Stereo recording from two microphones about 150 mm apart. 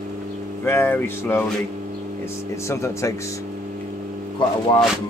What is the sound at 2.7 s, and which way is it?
Speech, 20° left (ahead or behind).